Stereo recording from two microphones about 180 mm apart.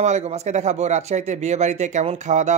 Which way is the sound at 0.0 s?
40° right (ahead or behind).